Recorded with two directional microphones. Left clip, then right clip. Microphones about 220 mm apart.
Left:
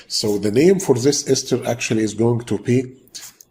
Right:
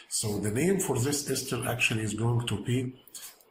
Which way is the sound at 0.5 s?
30° left (ahead or behind).